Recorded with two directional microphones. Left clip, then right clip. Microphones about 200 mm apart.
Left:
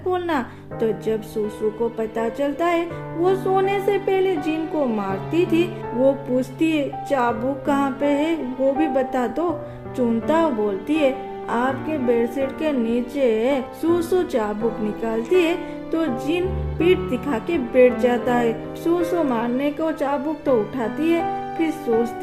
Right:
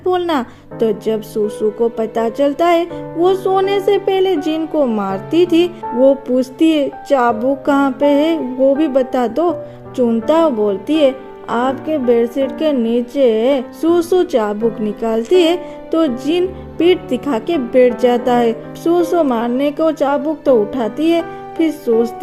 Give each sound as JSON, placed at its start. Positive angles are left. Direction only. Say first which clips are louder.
{"t": 0.1, "sound": "music", "louder": "right 6 dB", "side_deg": -35}